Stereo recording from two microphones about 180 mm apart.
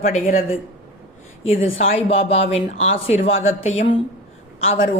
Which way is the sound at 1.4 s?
35° left (ahead or behind).